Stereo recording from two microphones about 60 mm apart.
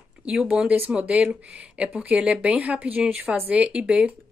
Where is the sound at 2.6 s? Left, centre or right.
Right.